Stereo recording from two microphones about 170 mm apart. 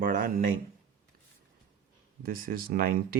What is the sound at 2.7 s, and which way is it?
Speech, 60° right (ahead or behind).